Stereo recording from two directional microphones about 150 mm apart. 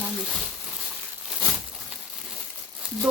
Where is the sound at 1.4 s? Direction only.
Centre (ahead or behind).